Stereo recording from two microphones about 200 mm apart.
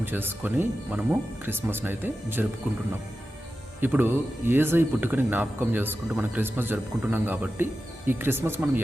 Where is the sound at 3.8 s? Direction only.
10° right (ahead or behind).